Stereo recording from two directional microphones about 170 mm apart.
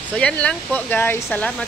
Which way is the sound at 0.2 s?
5° left (ahead or behind).